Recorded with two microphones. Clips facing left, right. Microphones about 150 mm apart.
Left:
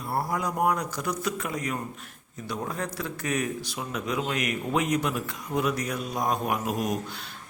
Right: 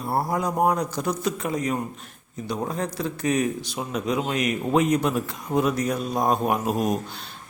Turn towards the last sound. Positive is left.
turn(degrees=-25)  # may be behind; listen again after turning